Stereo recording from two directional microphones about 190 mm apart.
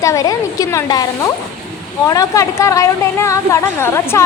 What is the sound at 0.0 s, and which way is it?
A woman's voice, 15° left (ahead or behind).